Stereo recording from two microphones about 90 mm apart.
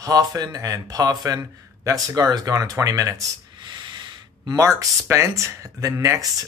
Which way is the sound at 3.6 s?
55° right (ahead or behind).